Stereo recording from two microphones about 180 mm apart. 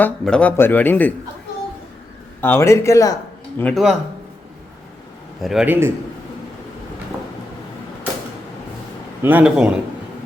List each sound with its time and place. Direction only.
0.0 s speech: 5° left (ahead or behind)
2.4 s speech: 15° left (ahead or behind)
3.6 s speech: 5° left (ahead or behind)
5.4 s a man's voice: centre (ahead or behind)
9.2 s a man's voice: 10° right (ahead or behind)